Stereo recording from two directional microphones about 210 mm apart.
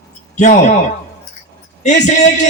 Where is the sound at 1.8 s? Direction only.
35° left (ahead or behind).